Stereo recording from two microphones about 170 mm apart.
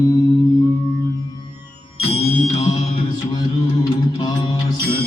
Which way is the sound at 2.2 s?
40° left (ahead or behind).